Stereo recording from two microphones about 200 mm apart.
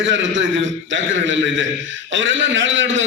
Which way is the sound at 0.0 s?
65° right (ahead or behind).